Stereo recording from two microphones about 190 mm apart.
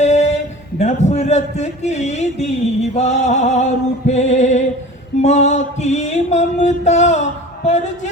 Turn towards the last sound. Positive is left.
turn(degrees=40)  # may be behind; listen again after turning